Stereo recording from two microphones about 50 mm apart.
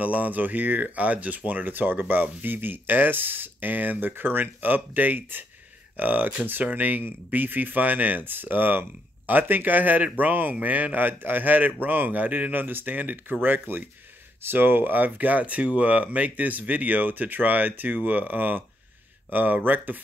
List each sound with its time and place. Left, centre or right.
0.0 s speech: right